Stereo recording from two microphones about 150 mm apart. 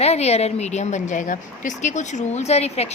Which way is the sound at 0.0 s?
45° left (ahead or behind).